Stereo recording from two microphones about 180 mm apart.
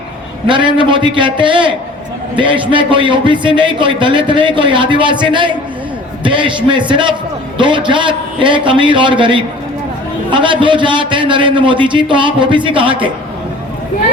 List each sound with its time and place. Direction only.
0.4 s a man's voice: 25° right (ahead or behind)